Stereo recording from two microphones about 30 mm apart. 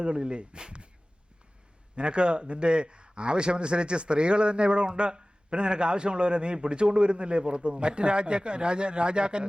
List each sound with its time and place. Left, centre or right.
0.0 s a man's voice: right
2.0 s a man's voice: right